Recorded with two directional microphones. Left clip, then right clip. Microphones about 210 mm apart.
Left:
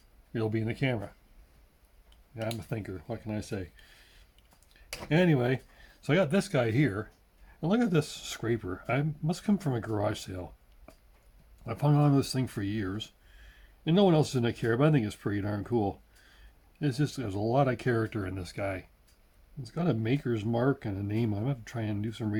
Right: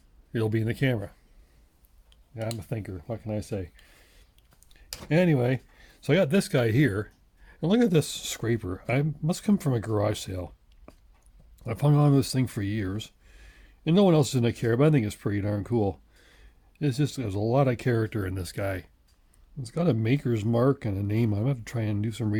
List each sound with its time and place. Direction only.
0.3 s speech: 40° right (ahead or behind)
4.7 s speech: 40° right (ahead or behind)